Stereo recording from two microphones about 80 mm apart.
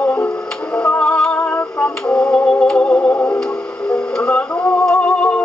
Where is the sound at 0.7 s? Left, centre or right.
Centre.